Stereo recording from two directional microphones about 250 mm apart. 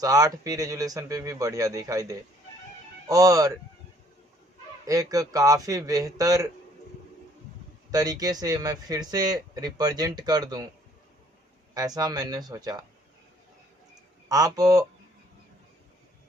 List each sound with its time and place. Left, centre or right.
0.0 s speech: centre
4.9 s speech: centre
7.9 s speech: centre
11.7 s speech: centre
14.3 s speech: centre